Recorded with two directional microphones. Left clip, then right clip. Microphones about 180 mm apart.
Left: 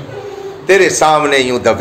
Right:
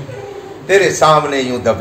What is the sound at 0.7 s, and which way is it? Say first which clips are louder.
A man's voice: left 1 dB; 50° left (ahead or behind).